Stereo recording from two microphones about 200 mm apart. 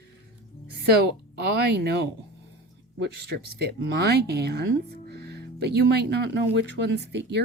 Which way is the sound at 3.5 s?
55° right (ahead or behind).